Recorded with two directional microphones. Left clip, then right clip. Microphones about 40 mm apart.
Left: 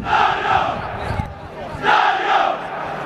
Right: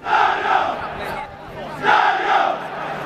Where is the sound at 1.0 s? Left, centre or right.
Right.